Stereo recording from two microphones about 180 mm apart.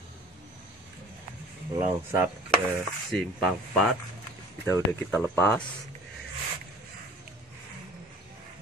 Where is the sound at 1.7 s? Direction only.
10° right (ahead or behind).